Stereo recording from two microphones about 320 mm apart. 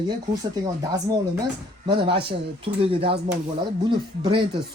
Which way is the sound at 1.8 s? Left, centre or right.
Centre.